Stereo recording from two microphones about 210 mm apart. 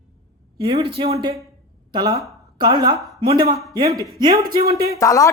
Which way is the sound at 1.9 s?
20° right (ahead or behind).